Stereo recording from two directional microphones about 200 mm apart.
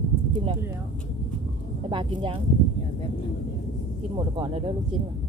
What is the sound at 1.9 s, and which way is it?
Speech, 25° right (ahead or behind).